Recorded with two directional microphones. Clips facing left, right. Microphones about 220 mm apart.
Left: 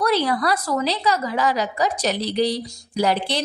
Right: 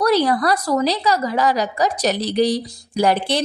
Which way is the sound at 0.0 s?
45° right (ahead or behind).